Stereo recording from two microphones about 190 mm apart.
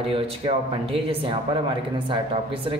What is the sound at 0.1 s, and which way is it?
Speech, 30° right (ahead or behind).